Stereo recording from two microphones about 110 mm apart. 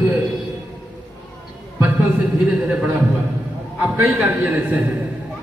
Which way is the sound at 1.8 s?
15° right (ahead or behind).